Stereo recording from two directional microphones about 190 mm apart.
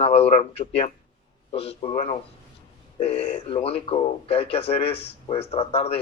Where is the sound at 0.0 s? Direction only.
30° left (ahead or behind).